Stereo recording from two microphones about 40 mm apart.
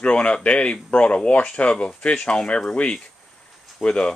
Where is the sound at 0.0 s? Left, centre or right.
Left.